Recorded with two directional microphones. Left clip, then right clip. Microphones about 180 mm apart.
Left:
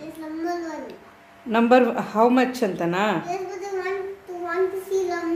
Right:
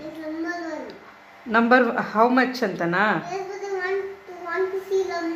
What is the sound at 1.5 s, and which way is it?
Speech, 25° left (ahead or behind).